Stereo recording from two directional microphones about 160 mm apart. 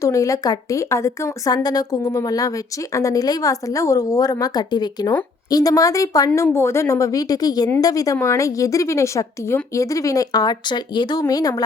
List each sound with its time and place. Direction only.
0.0 s a woman's voice: 20° left (ahead or behind)